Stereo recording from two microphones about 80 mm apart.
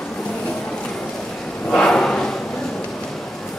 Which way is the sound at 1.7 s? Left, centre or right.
Centre.